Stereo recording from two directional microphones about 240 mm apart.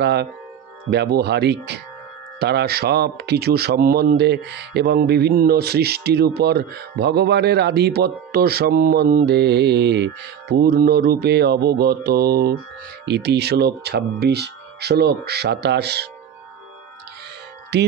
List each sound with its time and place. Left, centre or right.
0.0 s speech: right
17.7 s speech: right